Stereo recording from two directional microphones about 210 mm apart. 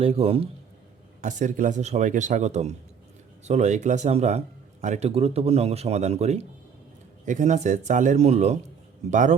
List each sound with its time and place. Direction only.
0.0 s a man's voice: 30° right (ahead or behind)